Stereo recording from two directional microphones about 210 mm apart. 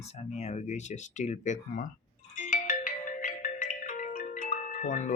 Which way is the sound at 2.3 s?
35° left (ahead or behind).